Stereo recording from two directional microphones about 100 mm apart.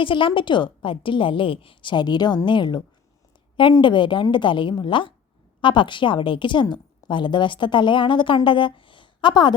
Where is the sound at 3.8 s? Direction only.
55° left (ahead or behind).